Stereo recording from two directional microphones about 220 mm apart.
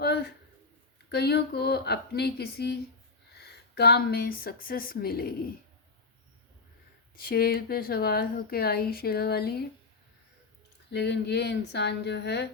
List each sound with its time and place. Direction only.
0.0 s a sound: 45° left (ahead or behind)
1.1 s a woman's voice: 45° left (ahead or behind)
7.2 s a woman's voice: 45° left (ahead or behind)
10.9 s a woman's voice: 50° left (ahead or behind)